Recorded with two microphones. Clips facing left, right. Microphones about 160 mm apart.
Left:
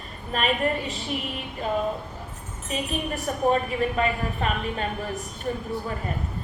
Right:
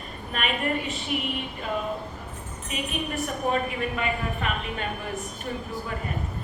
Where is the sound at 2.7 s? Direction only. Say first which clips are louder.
Left 2 dB; 35° left (ahead or behind).